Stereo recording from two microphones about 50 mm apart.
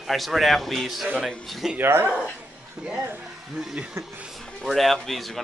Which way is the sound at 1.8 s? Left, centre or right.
Right.